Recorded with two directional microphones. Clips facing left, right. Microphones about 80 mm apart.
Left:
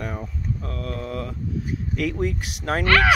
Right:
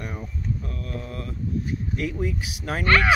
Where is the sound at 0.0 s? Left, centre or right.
Left.